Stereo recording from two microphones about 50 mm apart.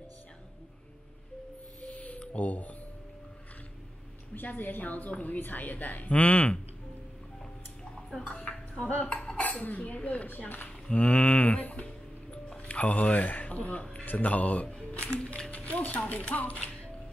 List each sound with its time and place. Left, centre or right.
1.8 s music: left
4.4 s a woman's voice: left
8.1 s dishes: centre
9.7 s a woman's voice: left
10.9 s music: left
14.0 s speech: left
15.5 s music: left
16.1 s speech: left